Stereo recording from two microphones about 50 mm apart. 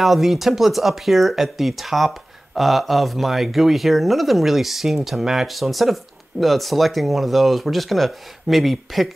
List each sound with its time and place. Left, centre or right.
0.0 s speech: centre